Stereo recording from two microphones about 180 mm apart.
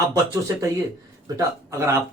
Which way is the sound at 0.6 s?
15° right (ahead or behind).